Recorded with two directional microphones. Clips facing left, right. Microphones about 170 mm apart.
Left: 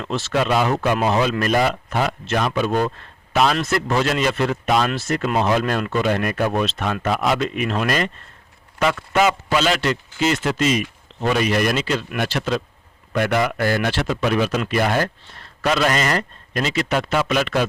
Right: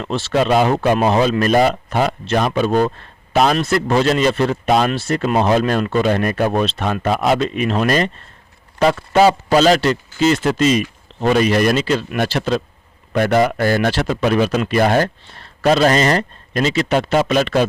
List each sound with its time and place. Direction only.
0.0 s a man's voice: 30° right (ahead or behind)